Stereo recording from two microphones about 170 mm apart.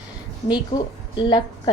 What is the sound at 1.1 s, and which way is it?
Speech, 30° left (ahead or behind).